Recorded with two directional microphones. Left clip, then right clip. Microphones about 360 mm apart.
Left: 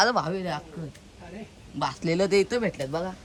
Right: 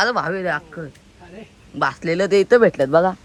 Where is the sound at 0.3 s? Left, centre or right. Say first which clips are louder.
Right 9 dB; centre.